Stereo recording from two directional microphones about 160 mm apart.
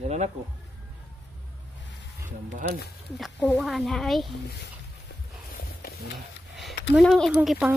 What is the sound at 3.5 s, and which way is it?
Speech, centre (ahead or behind).